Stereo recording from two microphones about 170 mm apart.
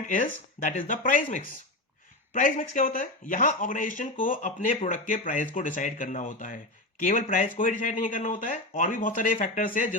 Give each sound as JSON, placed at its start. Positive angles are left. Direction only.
{"t": 0.1, "sound": "speech", "side_deg": 50}